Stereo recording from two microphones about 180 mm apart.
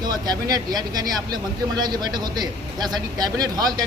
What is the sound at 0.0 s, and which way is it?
Speech, 20° right (ahead or behind).